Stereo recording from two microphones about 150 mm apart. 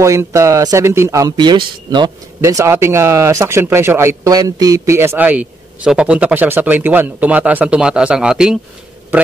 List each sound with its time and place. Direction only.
0.0 s speech: 20° right (ahead or behind); by 8.5 s 5° right (ahead or behind)